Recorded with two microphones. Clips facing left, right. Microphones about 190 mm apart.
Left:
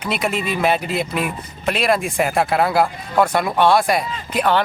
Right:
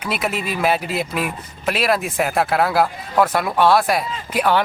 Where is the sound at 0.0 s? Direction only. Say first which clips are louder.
Left 2 dB; 5° right (ahead or behind).